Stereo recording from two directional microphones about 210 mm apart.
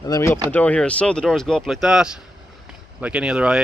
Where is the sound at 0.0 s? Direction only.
15° left (ahead or behind).